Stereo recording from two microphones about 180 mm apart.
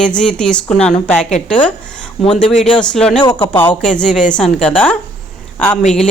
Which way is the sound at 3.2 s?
25° left (ahead or behind).